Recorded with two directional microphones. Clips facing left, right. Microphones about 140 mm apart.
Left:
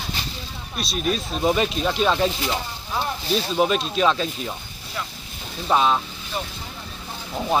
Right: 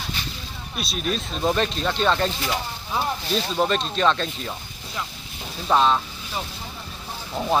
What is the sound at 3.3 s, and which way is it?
Speech, 5° left (ahead or behind).